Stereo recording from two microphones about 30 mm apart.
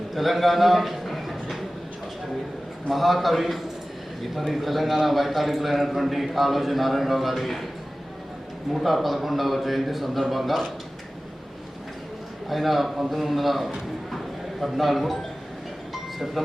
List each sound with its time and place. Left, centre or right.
0.1 s a man's voice: centre
2.9 s a man's voice: centre
8.7 s a man's voice: centre
12.5 s a man's voice: centre